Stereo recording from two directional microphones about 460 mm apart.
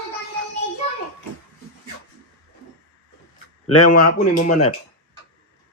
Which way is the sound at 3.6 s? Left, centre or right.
Left.